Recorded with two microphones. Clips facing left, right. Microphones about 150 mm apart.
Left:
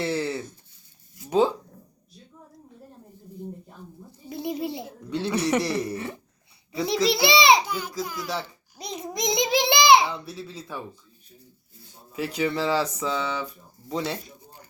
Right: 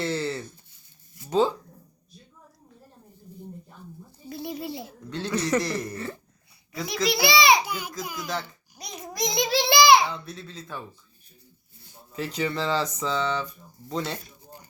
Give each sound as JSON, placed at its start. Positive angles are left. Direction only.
{"t": 0.0, "sound": "speech", "side_deg": 15}
{"t": 4.3, "sound": "speech", "side_deg": 20}
{"t": 6.8, "sound": "a child's voice", "side_deg": 30}
{"t": 7.6, "sound": "a child's voice", "side_deg": -10}
{"t": 8.8, "sound": "a child's voice", "side_deg": 25}
{"t": 12.1, "sound": "speech", "side_deg": 10}